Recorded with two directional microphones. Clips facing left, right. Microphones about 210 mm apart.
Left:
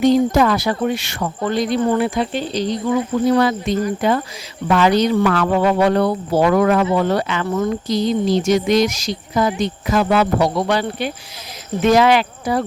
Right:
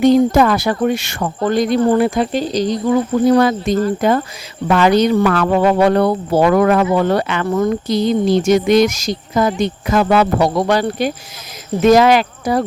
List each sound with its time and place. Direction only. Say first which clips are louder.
0.0 s speech: right 3 dB; 55° right (ahead or behind)